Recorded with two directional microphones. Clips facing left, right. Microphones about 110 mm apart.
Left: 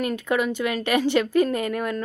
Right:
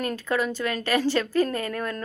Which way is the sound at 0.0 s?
15° left (ahead or behind).